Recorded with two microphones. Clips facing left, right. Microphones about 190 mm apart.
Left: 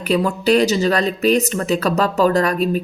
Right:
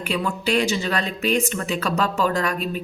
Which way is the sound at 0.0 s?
40° left (ahead or behind).